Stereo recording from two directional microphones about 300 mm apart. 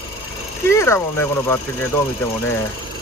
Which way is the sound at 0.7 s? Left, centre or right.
Centre.